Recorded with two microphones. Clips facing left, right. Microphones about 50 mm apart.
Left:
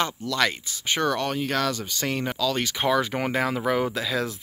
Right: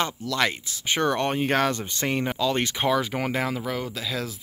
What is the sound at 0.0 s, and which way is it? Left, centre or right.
Speech, centre.